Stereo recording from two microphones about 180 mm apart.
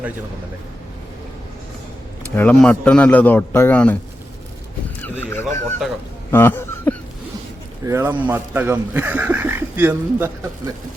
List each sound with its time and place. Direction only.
2.3 s speech: 10° left (ahead or behind)
5.0 s fowl: 10° left (ahead or behind)
6.3 s a sound: 10° left (ahead or behind)
7.9 s speech: 15° right (ahead or behind)